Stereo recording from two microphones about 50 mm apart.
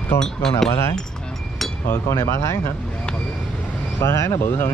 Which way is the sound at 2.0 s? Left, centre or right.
Left.